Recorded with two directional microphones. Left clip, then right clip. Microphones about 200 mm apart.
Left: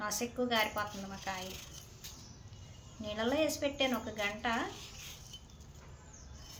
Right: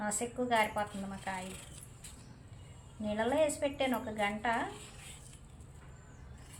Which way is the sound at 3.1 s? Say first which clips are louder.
Right 2 dB; 10° left (ahead or behind).